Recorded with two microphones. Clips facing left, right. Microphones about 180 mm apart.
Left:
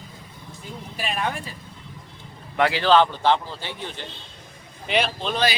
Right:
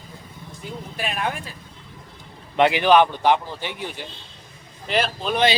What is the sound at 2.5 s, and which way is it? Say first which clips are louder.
A man's voice: right 2 dB; 20° right (ahead or behind).